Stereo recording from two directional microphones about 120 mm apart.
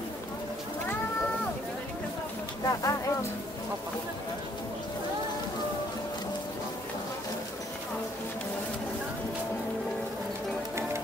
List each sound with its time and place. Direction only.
2.6 s speech: 25° left (ahead or behind)